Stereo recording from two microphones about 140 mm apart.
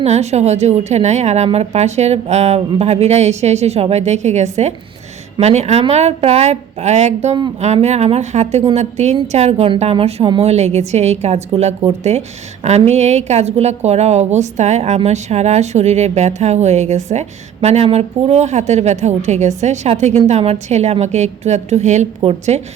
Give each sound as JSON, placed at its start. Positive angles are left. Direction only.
{"t": 0.0, "sound": "a woman's voice", "side_deg": -50}